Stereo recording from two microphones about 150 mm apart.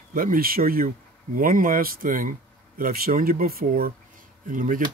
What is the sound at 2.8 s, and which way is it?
Speech, 80° right.